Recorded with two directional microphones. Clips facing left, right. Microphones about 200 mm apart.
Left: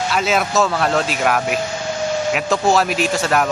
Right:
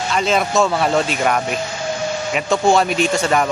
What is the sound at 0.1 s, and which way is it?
Speech, 5° left (ahead or behind).